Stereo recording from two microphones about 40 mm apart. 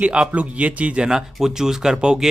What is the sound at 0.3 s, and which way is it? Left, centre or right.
Speech, right.